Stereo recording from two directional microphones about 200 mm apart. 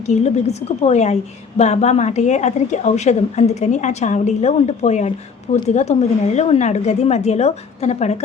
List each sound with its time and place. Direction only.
0.1 s a woman's voice: 35° left (ahead or behind)